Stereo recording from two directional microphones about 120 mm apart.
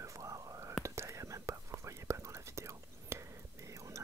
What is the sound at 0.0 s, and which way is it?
Whispering, 25° right (ahead or behind).